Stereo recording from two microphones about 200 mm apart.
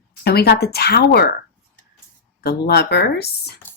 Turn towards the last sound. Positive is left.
turn(degrees=55)  # may be behind; listen again after turning